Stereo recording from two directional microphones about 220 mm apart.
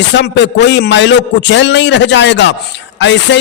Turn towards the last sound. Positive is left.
turn(degrees=55)  # may be behind; listen again after turning